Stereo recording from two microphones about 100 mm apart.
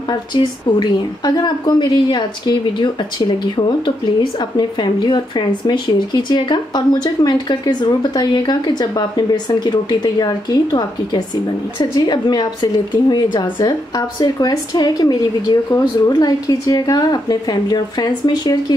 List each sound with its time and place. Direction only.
0.3 s a woman's voice: 45° left (ahead or behind)